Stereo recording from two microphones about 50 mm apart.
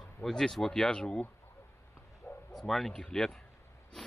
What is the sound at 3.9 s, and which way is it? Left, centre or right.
Snort, centre.